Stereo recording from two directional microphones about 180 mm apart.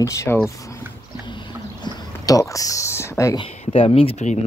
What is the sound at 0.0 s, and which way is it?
Speech, 15° left (ahead or behind).